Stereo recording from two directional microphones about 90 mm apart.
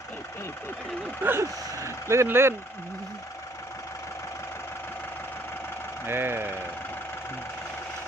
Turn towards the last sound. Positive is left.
turn(degrees=-25)  # may be behind; listen again after turning